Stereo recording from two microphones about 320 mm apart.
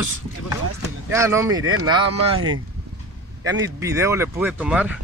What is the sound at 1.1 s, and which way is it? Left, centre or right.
Speech, centre.